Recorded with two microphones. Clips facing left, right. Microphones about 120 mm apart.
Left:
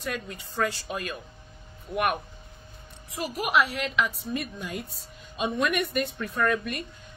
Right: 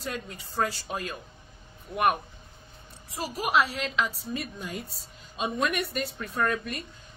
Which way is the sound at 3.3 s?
30° right (ahead or behind).